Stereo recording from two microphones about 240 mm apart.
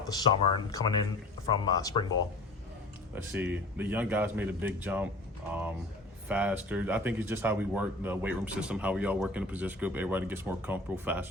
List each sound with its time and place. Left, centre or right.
0.1 s speech: centre
3.3 s speech: centre
6.2 s speech: centre